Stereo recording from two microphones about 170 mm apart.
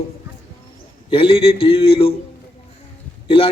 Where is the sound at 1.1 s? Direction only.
35° left (ahead or behind).